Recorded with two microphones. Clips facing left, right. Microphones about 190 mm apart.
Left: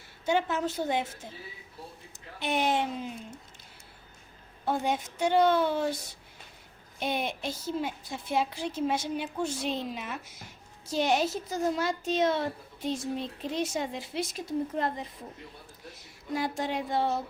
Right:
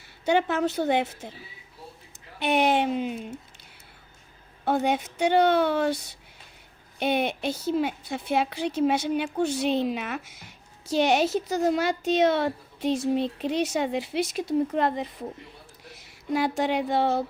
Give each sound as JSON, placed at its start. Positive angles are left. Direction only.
{"t": 0.3, "sound": "a child's voice", "side_deg": -65}
{"t": 2.4, "sound": "a child's voice", "side_deg": -65}
{"t": 4.6, "sound": "a child's voice", "side_deg": -65}
{"t": 7.0, "sound": "a child's voice", "side_deg": -65}
{"t": 16.3, "sound": "a child's voice", "side_deg": -75}